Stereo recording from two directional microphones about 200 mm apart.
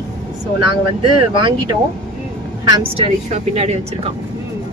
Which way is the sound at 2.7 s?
30° right (ahead or behind).